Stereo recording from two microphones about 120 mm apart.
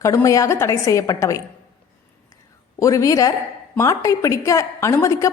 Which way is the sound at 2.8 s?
25° left (ahead or behind).